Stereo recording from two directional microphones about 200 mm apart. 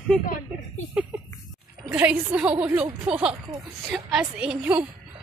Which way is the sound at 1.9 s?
5° right (ahead or behind).